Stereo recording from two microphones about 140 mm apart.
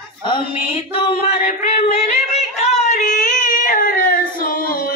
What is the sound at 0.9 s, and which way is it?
Singing, 45° left (ahead or behind).